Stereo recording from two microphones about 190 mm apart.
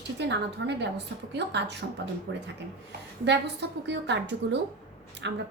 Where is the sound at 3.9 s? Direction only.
65° right (ahead or behind).